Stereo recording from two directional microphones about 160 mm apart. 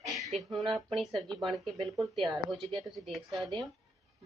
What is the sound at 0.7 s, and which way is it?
A woman's voice, centre (ahead or behind).